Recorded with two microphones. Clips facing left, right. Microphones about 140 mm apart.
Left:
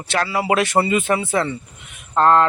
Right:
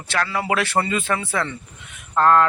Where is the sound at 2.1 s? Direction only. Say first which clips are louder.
Left 1 dB; 25° left (ahead or behind).